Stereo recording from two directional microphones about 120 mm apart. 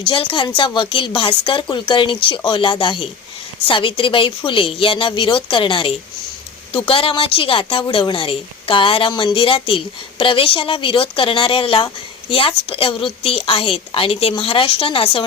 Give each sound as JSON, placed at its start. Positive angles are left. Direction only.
{"t": 0.1, "sound": "a woman's voice", "side_deg": 45}